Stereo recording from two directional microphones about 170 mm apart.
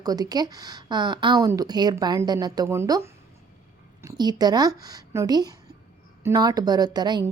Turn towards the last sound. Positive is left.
turn(degrees=-25)  # may be behind; listen again after turning